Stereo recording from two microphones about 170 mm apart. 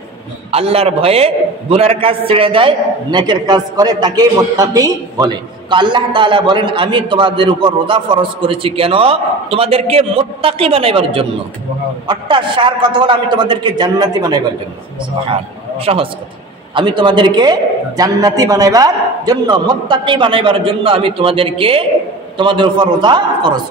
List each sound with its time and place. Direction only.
0.5 s a man's voice: 35° right (ahead or behind)
15.8 s a man's voice: 35° right (ahead or behind)